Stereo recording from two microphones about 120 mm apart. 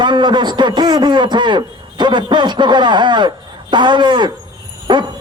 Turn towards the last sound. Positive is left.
turn(degrees=-40)  # may be behind; listen again after turning